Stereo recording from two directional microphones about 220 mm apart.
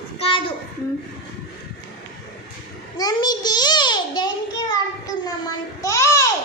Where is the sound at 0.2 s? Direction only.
25° left (ahead or behind).